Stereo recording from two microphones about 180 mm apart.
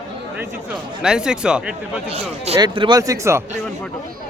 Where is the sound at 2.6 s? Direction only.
25° right (ahead or behind).